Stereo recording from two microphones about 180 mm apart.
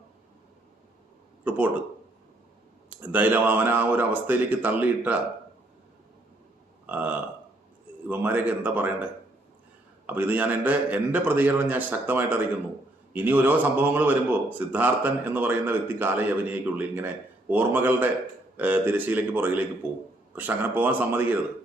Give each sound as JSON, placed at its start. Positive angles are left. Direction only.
{"t": 1.5, "sound": "a man's voice", "side_deg": -10}
{"t": 3.0, "sound": "a man's voice", "side_deg": -10}
{"t": 6.8, "sound": "a man's voice", "side_deg": -10}
{"t": 10.1, "sound": "a man's voice", "side_deg": -10}